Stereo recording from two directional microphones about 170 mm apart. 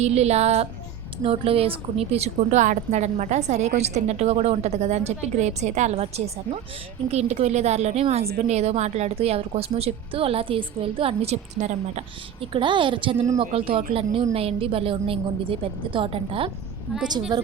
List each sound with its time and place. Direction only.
0.0 s speech: 40° right (ahead or behind)
13.1 s speech: 20° right (ahead or behind)
13.4 s a woman's voice: 35° right (ahead or behind)